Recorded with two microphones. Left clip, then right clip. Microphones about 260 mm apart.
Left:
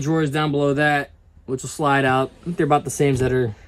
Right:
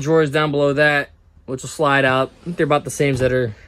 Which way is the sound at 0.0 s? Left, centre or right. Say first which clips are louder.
Right 5 dB; centre.